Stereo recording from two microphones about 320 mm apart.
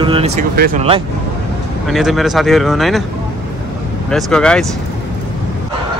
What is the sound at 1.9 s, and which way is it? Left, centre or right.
Speech, centre.